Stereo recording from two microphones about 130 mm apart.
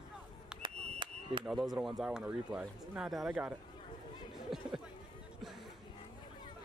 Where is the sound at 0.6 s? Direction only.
40° right (ahead or behind).